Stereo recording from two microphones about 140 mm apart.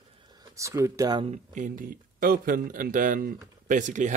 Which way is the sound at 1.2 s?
65° right (ahead or behind).